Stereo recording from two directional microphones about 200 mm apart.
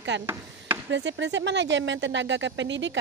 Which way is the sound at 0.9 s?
60° right (ahead or behind).